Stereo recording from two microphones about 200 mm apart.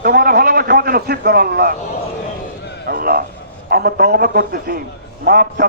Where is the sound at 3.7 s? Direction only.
50° right (ahead or behind).